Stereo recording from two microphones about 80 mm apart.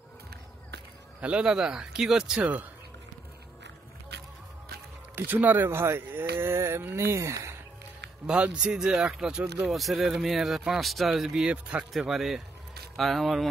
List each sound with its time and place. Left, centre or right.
1.4 s speech: centre
5.1 s speech: right
6.4 s a sound: right
8.3 s speech: centre